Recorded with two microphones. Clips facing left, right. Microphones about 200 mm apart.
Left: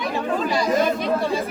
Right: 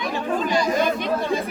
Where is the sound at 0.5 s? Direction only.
Centre (ahead or behind).